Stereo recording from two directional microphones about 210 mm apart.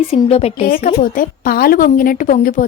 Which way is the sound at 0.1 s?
30° left (ahead or behind).